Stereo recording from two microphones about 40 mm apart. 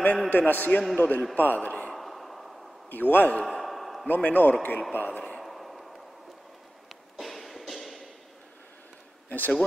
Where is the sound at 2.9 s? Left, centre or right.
Left.